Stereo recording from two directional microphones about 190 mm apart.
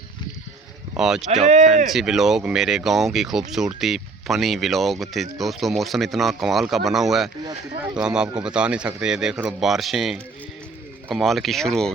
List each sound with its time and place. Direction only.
0.9 s speech: 5° right (ahead or behind)
1.5 s speech: 40° right (ahead or behind)
1.9 s speech: centre (ahead or behind)
7.4 s a sound: 20° right (ahead or behind)
8.0 s speech: 5° right (ahead or behind)